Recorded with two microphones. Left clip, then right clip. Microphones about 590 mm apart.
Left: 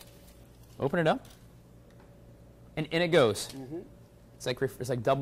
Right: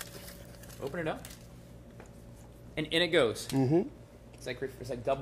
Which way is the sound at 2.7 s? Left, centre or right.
Left.